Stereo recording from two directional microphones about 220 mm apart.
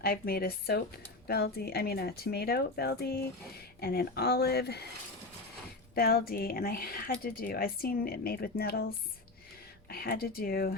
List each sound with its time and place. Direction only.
0.0 s speech: 45° left (ahead or behind)
5.9 s speech: 45° left (ahead or behind)
9.9 s speech: 45° left (ahead or behind)